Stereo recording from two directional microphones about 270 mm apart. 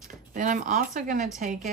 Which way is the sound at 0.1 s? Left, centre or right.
Right.